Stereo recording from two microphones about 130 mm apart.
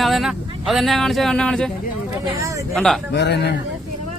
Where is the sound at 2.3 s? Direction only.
25° right (ahead or behind).